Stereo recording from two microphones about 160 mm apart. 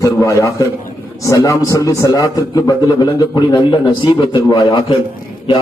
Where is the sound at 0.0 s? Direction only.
20° left (ahead or behind).